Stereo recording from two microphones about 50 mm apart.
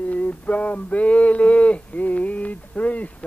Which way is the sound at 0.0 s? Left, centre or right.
Left.